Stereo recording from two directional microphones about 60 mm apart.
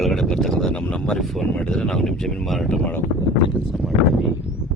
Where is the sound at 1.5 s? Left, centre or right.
Centre.